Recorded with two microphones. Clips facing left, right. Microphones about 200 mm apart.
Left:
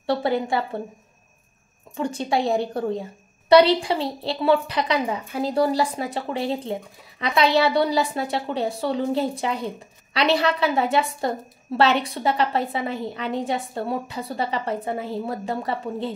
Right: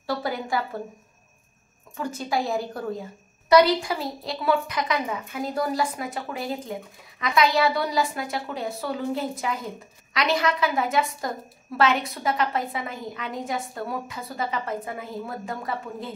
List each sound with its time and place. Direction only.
0.0 s a woman's voice: 25° left (ahead or behind)
2.0 s a woman's voice: 30° left (ahead or behind)